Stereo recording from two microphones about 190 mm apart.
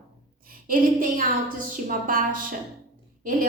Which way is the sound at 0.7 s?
45° right (ahead or behind).